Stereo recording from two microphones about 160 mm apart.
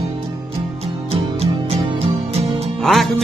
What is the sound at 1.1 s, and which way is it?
Music, 40° right (ahead or behind).